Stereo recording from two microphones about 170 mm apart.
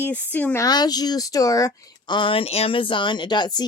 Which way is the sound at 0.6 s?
25° left (ahead or behind).